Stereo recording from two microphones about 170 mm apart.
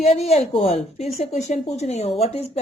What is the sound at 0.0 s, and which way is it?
A woman's voice, 40° left (ahead or behind).